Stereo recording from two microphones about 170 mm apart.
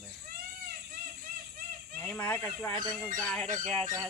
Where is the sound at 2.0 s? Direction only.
10° left (ahead or behind).